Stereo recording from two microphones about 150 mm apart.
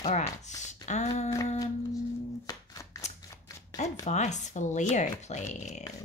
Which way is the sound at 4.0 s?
50° left (ahead or behind).